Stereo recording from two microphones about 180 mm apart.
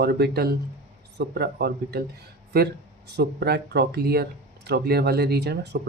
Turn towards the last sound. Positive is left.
turn(degrees=-65)  # may be behind; listen again after turning